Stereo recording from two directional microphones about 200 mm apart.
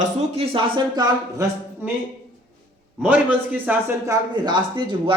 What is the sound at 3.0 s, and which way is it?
A man's voice, 5° right (ahead or behind).